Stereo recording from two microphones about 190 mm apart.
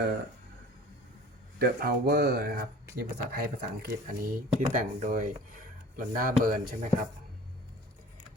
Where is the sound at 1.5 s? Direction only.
55° right (ahead or behind).